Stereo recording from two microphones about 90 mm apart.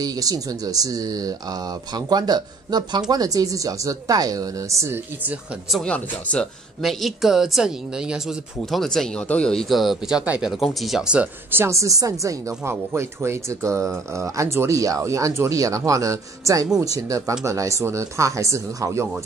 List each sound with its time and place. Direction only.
0.0 s speech: 45° right (ahead or behind)
5.9 s speech: 15° left (ahead or behind)
6.8 s speech: centre (ahead or behind)
8.6 s speech: 5° left (ahead or behind)
11.5 s speech: 30° right (ahead or behind)